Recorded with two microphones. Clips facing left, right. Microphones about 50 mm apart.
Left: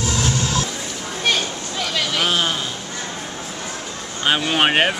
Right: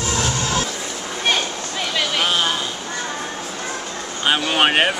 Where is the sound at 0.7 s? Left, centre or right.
Centre.